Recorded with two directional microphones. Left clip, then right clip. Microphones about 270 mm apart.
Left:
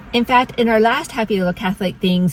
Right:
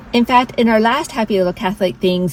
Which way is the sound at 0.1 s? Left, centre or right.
Centre.